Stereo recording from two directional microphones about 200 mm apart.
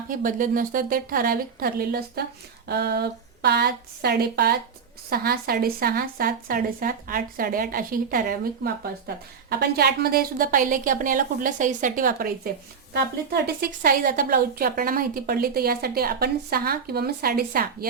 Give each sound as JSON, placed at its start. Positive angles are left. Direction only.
{"t": 0.1, "sound": "speech", "side_deg": -40}